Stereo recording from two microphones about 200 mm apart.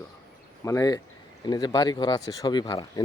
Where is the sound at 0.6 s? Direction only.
15° left (ahead or behind).